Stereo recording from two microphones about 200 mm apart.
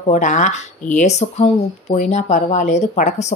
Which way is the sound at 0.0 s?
35° left (ahead or behind).